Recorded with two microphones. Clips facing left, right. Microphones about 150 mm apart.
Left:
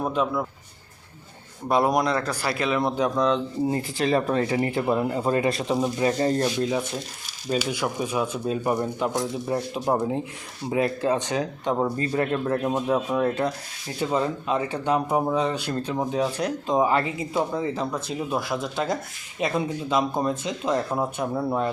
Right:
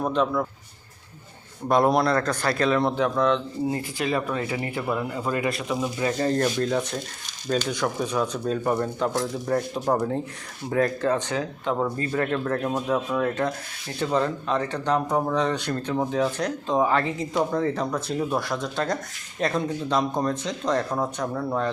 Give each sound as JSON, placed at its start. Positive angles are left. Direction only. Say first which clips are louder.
{"t": 0.0, "sound": "speech", "louder": "right 1 dB", "side_deg": 5}
{"t": 1.6, "sound": "speech", "louder": "right 1 dB", "side_deg": 5}
{"t": 3.7, "sound": "speech", "louder": "left 3 dB", "side_deg": 30}
{"t": 14.0, "sound": "speech", "louder": "right 1 dB", "side_deg": 10}